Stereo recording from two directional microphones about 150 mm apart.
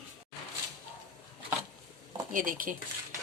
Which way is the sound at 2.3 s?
65° right (ahead or behind).